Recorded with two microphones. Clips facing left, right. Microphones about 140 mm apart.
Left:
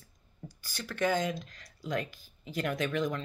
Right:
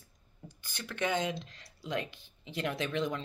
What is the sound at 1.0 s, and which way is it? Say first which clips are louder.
Speech: left 3 dB; 25° right (ahead or behind).